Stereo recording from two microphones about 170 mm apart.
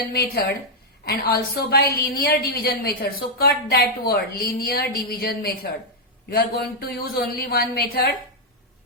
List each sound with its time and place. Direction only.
0.1 s a woman's voice: 70° left (ahead or behind)